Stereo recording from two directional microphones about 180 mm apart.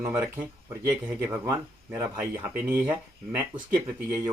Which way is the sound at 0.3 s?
15° right (ahead or behind).